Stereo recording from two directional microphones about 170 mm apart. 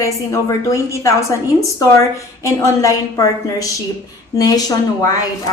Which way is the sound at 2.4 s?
15° left (ahead or behind).